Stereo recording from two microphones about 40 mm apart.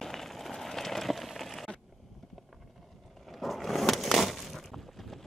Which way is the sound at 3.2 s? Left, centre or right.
Centre.